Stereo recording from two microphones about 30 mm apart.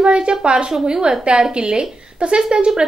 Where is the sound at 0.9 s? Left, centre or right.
Centre.